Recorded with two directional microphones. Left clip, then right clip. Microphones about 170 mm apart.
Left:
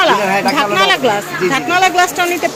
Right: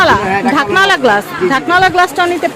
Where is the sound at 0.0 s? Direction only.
35° right (ahead or behind).